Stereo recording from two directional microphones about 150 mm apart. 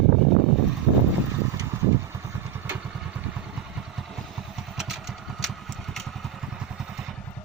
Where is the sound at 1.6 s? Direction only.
20° right (ahead or behind).